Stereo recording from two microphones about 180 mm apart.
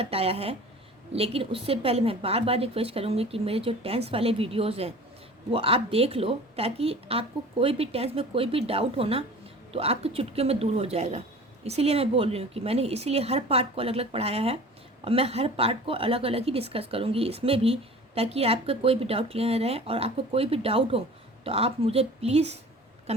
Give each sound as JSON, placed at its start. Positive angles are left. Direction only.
{"t": 0.0, "sound": "a woman's voice", "side_deg": -35}